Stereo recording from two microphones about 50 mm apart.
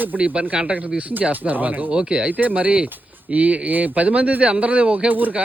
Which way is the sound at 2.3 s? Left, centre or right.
Right.